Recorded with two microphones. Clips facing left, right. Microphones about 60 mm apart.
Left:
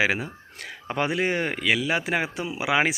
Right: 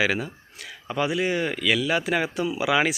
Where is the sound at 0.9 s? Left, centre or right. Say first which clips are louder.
Even; left.